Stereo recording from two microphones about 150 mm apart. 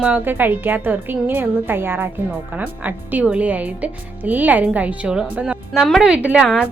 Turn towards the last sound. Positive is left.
turn(degrees=-5)  # may be behind; listen again after turning